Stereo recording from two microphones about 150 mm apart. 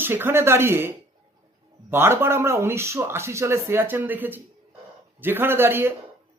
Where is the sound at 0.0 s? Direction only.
15° right (ahead or behind).